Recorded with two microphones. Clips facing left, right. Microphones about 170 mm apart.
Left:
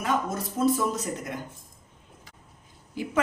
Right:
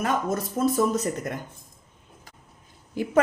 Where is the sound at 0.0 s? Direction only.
45° right (ahead or behind).